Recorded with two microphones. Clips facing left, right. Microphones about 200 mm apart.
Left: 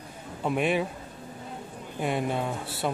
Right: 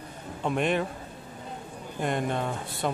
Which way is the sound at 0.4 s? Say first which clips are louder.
Left 1 dB; 5° left (ahead or behind).